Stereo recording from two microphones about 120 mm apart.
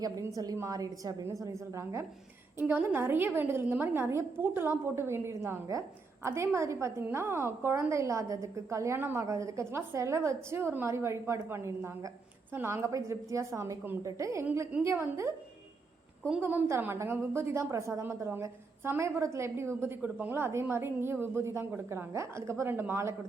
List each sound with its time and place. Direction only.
0.0 s a woman's voice: 30° right (ahead or behind)
16.4 s a woman's voice: 20° right (ahead or behind)